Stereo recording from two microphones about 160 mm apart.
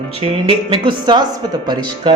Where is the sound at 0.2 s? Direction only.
35° right (ahead or behind).